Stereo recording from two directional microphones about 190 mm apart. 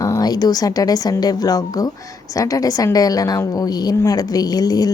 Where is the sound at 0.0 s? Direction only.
20° left (ahead or behind).